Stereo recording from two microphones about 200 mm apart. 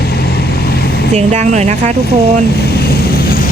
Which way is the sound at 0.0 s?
50° left (ahead or behind).